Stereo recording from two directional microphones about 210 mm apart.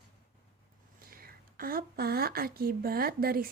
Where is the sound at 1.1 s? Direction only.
45° right (ahead or behind).